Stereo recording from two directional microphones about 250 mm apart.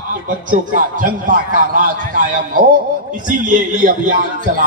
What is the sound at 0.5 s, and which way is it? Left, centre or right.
A man's voice, right.